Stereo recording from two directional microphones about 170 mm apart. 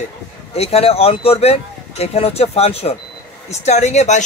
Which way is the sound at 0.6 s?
35° left (ahead or behind).